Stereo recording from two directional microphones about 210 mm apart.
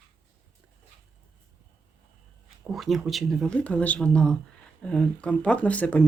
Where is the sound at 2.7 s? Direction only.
Centre (ahead or behind).